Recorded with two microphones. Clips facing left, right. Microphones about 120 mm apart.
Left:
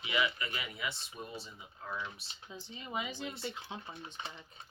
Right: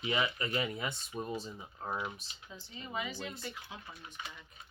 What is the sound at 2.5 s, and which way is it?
Speech, 20° left (ahead or behind).